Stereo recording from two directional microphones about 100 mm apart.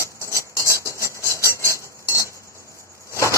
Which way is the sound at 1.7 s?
30° left (ahead or behind).